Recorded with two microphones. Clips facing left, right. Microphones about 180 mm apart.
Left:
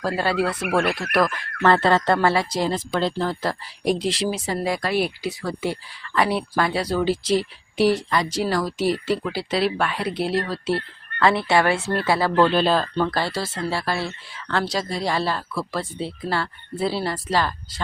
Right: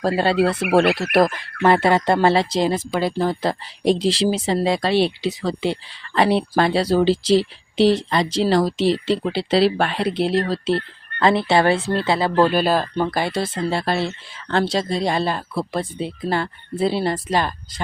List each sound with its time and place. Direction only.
1.3 s speech: 15° right (ahead or behind)
2.1 s speech: 25° right (ahead or behind)
2.7 s speech: 10° right (ahead or behind)
12.5 s speech: 10° right (ahead or behind)